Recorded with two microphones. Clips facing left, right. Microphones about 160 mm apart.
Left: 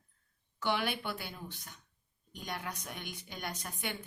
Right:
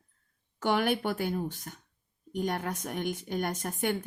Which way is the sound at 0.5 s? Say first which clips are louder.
Right 7 dB; 45° right (ahead or behind).